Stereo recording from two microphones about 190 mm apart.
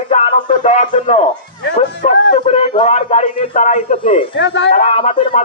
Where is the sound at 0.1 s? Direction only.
40° left (ahead or behind).